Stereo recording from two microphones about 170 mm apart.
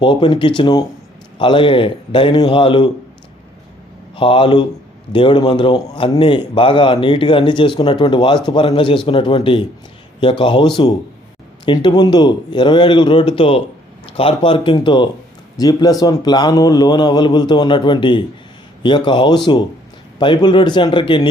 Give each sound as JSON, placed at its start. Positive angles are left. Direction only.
{"t": 0.0, "sound": "a man's voice", "side_deg": 30}
{"t": 4.1, "sound": "a man's voice", "side_deg": 30}